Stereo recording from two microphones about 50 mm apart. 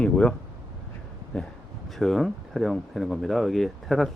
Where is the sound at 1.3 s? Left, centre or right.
Centre.